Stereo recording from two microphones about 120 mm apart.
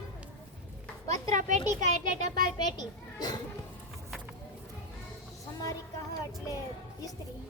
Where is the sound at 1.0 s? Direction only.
90° right.